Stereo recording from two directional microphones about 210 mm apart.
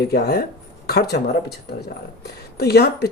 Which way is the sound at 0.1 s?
50° left (ahead or behind).